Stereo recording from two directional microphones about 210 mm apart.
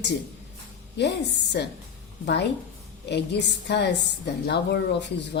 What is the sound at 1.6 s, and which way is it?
Speech, 55° left (ahead or behind).